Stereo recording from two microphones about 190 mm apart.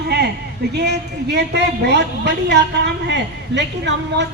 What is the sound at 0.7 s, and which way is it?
A woman's voice, 60° right (ahead or behind).